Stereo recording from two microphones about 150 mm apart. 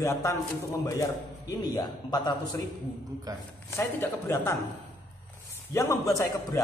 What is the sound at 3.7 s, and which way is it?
Speech, 15° left (ahead or behind).